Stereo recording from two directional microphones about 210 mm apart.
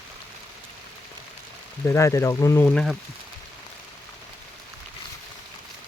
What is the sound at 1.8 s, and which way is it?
Speech, 15° left (ahead or behind).